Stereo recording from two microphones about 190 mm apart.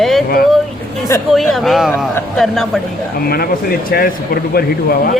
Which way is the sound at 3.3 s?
55° left (ahead or behind).